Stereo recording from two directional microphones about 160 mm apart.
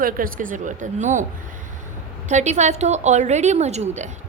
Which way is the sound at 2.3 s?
50° right (ahead or behind).